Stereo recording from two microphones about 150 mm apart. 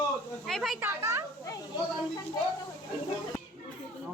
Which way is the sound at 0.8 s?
15° right (ahead or behind).